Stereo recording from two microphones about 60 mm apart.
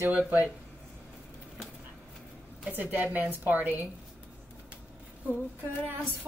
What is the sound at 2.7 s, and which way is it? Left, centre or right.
A woman's voice, right.